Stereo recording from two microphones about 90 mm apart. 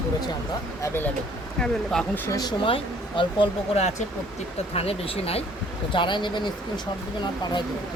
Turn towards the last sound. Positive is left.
turn(degrees=55)  # may be behind; listen again after turning